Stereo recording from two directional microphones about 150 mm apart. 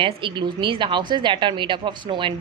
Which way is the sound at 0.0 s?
35° right (ahead or behind).